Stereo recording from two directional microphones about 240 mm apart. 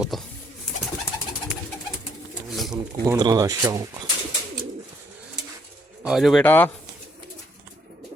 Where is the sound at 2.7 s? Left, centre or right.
Centre.